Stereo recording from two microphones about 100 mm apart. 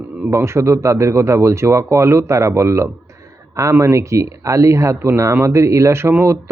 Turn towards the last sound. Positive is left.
turn(degrees=-25)  # may be behind; listen again after turning